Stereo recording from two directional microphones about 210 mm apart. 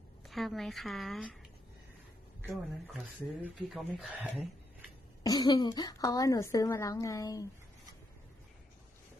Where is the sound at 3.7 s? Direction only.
Centre (ahead or behind).